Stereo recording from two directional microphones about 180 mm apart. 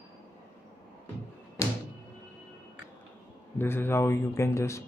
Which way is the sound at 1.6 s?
15° left (ahead or behind).